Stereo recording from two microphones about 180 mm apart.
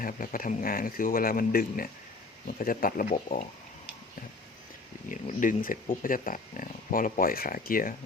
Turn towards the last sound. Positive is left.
turn(degrees=50)  # may be behind; listen again after turning